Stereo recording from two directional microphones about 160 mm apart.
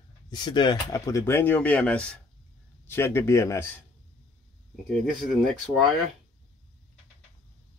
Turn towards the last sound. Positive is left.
turn(degrees=0)  # may be behind; listen again after turning